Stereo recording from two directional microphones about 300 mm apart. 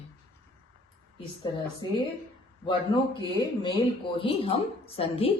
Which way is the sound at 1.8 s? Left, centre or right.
Centre.